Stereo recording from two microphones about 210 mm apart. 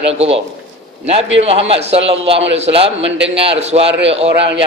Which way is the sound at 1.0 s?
30° right (ahead or behind).